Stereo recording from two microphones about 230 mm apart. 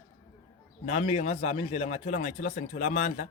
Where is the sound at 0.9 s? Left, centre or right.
Left.